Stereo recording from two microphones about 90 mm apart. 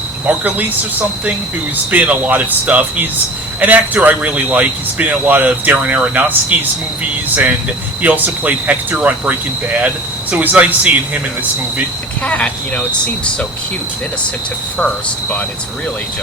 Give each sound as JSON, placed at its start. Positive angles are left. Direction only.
{"t": 0.3, "sound": "speech", "side_deg": -20}
{"t": 8.0, "sound": "speech", "side_deg": -20}
{"t": 10.3, "sound": "speech", "side_deg": -15}
{"t": 12.2, "sound": "speech", "side_deg": 15}